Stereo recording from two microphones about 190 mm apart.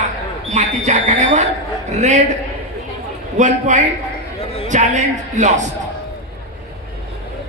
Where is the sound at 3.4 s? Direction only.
40° right (ahead or behind).